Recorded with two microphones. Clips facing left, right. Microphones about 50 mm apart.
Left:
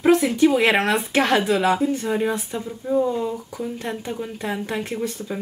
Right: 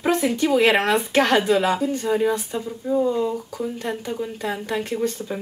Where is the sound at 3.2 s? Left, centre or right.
Left.